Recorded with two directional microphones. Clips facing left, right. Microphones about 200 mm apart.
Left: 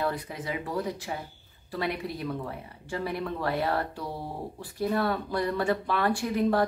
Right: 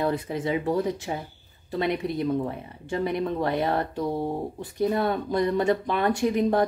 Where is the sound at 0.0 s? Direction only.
25° right (ahead or behind).